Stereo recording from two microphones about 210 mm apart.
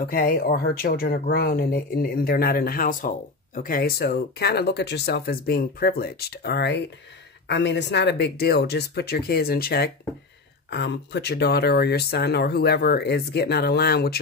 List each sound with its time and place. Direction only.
0.0 s speech: 45° left (ahead or behind)